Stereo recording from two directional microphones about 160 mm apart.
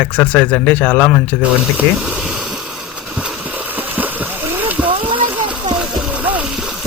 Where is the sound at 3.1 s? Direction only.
10° right (ahead or behind).